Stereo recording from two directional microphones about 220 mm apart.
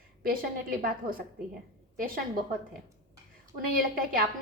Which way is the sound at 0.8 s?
40° right (ahead or behind).